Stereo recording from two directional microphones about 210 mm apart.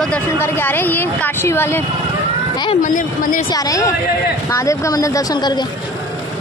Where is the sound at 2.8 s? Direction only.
40° left (ahead or behind).